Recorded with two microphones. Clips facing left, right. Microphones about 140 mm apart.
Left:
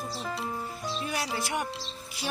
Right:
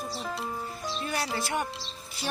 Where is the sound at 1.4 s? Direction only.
15° left (ahead or behind).